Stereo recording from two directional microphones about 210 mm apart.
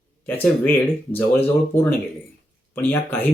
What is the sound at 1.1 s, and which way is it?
Speech, 10° left (ahead or behind).